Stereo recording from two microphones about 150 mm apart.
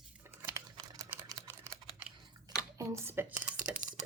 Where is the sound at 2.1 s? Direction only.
5° right (ahead or behind).